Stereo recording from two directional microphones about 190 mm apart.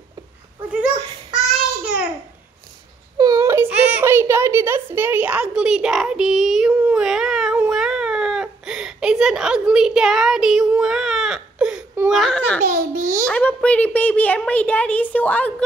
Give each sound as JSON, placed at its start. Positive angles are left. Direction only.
{"t": 3.2, "sound": "a sound", "side_deg": -20}
{"t": 12.2, "sound": "a child's voice", "side_deg": 5}
{"t": 12.6, "sound": "a child's voice", "side_deg": -55}
{"t": 13.3, "sound": "a woman's voice", "side_deg": 5}